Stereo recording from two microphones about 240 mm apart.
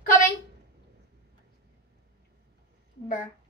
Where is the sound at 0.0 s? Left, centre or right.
Left.